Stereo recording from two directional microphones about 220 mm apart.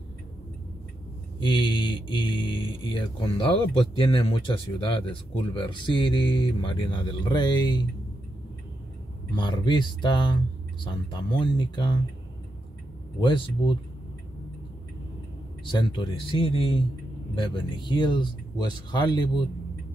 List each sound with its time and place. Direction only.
1.4 s speech: 20° left (ahead or behind)
9.3 s speech: 20° left (ahead or behind)
13.2 s speech: 20° left (ahead or behind)
15.6 s speech: 20° left (ahead or behind)